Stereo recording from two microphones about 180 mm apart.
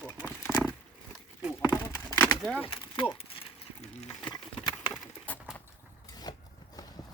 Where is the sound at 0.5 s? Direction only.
Centre (ahead or behind).